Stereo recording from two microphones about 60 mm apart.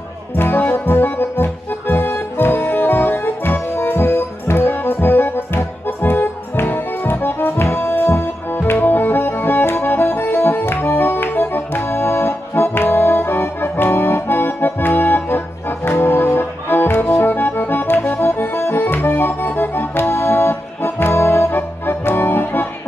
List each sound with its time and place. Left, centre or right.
0.3 s music: left